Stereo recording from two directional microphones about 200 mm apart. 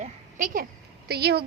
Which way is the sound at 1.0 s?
55° right (ahead or behind).